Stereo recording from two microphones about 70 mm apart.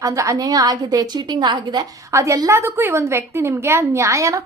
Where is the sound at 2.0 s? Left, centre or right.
Right.